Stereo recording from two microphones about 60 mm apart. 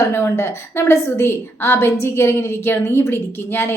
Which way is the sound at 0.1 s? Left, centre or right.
Left.